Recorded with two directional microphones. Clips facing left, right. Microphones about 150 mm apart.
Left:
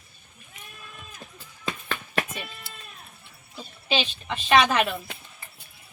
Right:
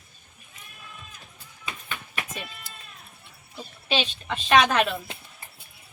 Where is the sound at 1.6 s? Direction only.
90° left.